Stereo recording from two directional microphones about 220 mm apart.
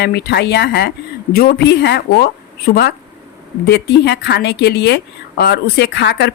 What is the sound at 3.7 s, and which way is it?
Speech, 50° left (ahead or behind).